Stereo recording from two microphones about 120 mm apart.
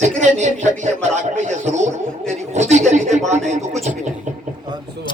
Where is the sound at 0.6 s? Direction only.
85° right.